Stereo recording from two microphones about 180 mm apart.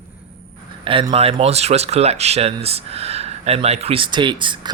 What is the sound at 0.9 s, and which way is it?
Speech, 30° right (ahead or behind).